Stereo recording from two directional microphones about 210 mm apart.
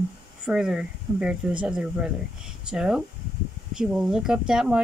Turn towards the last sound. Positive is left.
turn(degrees=-5)  # may be behind; listen again after turning